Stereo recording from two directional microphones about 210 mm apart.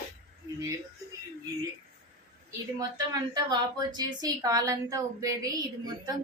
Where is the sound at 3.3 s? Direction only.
20° right (ahead or behind).